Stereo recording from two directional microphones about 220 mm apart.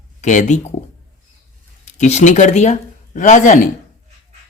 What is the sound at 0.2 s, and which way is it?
Speech, 35° left (ahead or behind).